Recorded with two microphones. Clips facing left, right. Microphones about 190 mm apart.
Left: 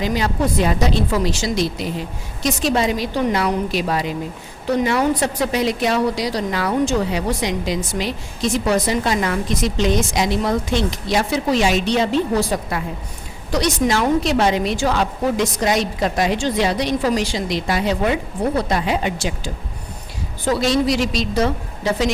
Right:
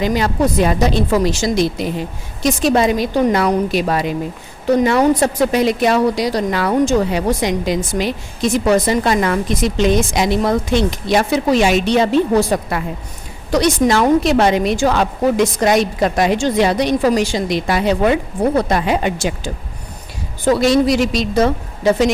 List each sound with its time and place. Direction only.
0.0 s a woman's voice: 55° right (ahead or behind)
20.6 s a woman's voice: 55° right (ahead or behind)